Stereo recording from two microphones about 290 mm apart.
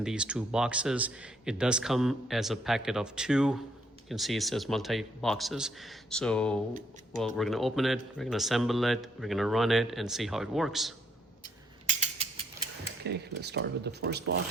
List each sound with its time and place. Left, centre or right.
0.0 s a man's voice: centre
11.9 s mechanisms: right
13.1 s speech: right